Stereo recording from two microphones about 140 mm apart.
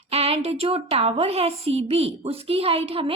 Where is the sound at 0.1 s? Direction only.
45° right (ahead or behind).